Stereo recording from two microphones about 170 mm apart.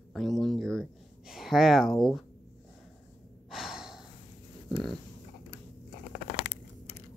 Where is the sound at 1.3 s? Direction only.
Centre (ahead or behind).